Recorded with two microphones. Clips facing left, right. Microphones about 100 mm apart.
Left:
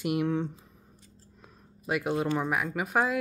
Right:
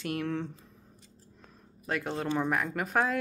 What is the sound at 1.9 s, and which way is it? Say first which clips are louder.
Speech: left 3 dB; 10° left (ahead or behind).